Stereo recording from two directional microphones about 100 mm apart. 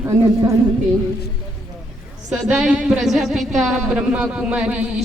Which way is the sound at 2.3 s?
5° right (ahead or behind).